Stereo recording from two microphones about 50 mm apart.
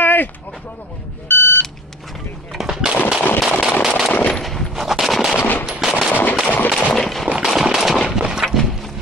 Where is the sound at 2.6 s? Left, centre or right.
Centre.